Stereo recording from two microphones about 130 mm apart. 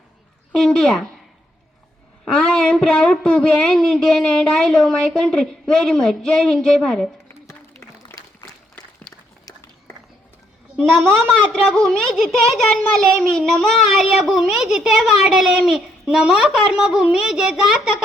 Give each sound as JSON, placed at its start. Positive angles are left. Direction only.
{"t": 0.5, "sound": "speech", "side_deg": 5}
{"t": 2.2, "sound": "speech", "side_deg": 5}
{"t": 7.4, "sound": "a sound", "side_deg": 20}
{"t": 9.5, "sound": "run", "side_deg": 20}
{"t": 10.8, "sound": "a woman's voice", "side_deg": -10}
{"t": 11.3, "sound": "speech", "side_deg": 5}